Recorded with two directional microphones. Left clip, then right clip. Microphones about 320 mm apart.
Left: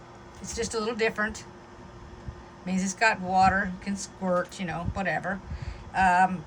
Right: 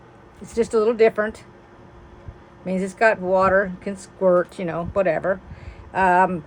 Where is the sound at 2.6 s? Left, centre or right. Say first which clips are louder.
Right 6 dB; centre.